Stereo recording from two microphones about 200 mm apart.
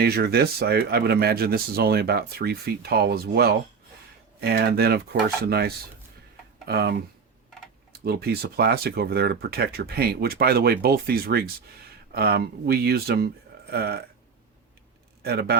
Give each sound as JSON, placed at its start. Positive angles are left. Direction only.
{"t": 0.0, "sound": "speech", "side_deg": -50}
{"t": 7.9, "sound": "speech", "side_deg": -50}
{"t": 15.2, "sound": "speech", "side_deg": -50}